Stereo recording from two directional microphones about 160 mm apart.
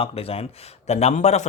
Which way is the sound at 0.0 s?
35° left (ahead or behind).